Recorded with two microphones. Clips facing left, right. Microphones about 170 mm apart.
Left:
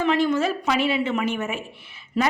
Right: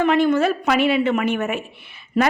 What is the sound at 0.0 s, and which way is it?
A woman's voice, 55° right (ahead or behind).